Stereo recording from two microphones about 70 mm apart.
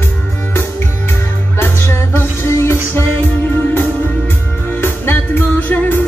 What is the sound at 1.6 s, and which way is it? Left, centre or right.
Music, left.